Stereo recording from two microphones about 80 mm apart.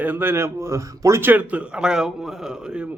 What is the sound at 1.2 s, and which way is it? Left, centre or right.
A man's voice, right.